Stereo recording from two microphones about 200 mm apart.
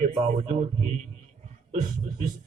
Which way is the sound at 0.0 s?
30° right (ahead or behind).